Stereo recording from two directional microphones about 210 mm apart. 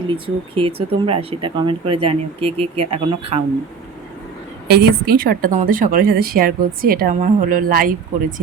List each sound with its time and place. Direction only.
0.5 s speech: 25° right (ahead or behind)
4.7 s a woman's voice: 50° right (ahead or behind)